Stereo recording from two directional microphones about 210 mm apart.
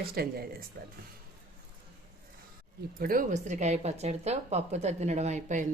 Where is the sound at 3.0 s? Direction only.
40° right (ahead or behind).